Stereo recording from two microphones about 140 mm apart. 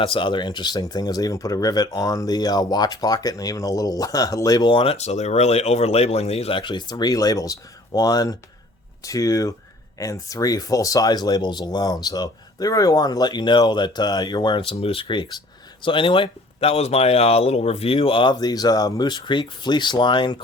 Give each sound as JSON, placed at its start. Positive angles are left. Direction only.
{"t": 0.0, "sound": "speech", "side_deg": 35}